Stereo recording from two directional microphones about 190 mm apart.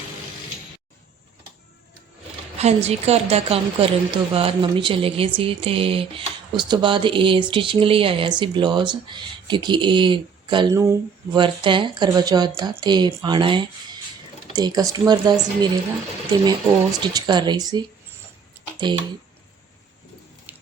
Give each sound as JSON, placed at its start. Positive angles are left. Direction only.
{"t": 2.6, "sound": "a woman's voice", "side_deg": -35}
{"t": 16.5, "sound": "a woman's voice", "side_deg": -25}
{"t": 18.8, "sound": "a woman's voice", "side_deg": -25}
{"t": 20.5, "sound": "water tap", "side_deg": -10}